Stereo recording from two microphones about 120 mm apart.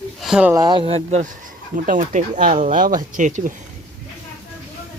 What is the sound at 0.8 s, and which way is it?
Speech, 60° right (ahead or behind).